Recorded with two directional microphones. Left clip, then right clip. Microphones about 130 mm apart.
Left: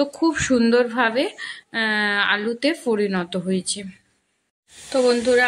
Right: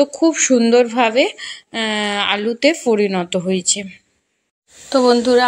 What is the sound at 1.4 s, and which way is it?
Speech, 25° left (ahead or behind).